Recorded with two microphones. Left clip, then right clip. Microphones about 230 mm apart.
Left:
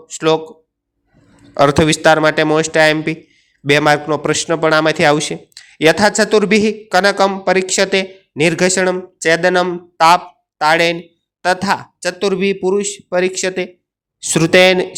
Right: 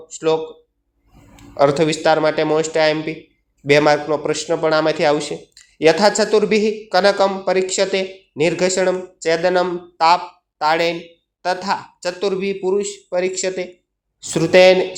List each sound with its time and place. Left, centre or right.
0.1 s a man's voice: left
1.5 s a man's voice: left